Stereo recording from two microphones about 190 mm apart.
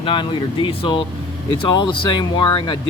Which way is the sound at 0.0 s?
25° left (ahead or behind).